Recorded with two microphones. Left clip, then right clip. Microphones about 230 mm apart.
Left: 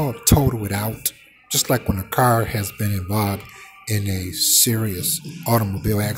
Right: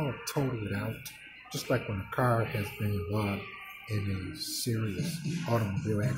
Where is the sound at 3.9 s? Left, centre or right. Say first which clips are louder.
Left 12 dB; left.